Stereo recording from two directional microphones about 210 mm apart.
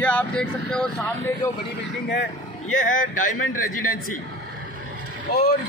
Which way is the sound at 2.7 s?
35° left (ahead or behind).